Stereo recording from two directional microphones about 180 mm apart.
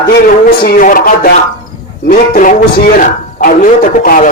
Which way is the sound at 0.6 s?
50° left (ahead or behind).